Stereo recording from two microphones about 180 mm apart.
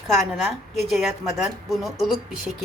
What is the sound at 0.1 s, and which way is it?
Speech, centre (ahead or behind).